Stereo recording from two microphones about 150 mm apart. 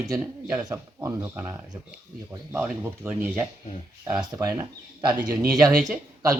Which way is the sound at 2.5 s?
15° right (ahead or behind).